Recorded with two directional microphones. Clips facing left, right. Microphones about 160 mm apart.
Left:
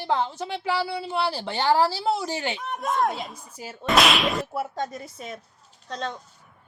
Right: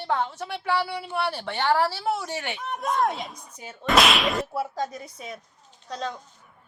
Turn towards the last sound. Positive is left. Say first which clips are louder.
# even
turn(degrees=-5)  # may be behind; listen again after turning